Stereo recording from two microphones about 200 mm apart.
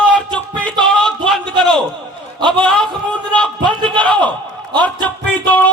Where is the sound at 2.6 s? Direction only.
5° left (ahead or behind).